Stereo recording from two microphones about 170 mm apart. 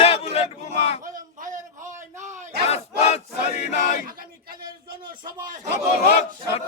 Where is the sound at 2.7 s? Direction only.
40° left (ahead or behind).